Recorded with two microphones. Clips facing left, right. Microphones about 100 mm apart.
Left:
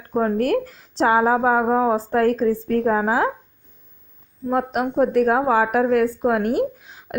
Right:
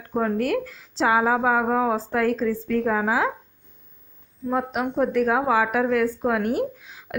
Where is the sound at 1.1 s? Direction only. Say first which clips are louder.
Left 3 dB; 35° left (ahead or behind).